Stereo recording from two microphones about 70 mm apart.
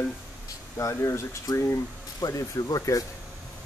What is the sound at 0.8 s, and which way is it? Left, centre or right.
Speech, left.